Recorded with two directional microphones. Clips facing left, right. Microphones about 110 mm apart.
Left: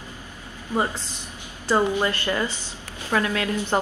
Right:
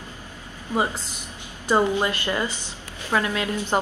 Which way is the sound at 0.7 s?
15° right (ahead or behind).